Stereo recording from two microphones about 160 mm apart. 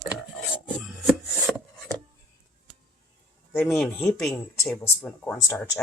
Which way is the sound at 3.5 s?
5° left (ahead or behind).